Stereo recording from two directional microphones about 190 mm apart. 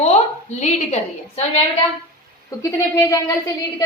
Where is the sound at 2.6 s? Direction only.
15° left (ahead or behind).